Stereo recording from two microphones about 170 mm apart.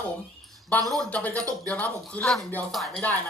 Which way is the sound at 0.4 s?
Centre (ahead or behind).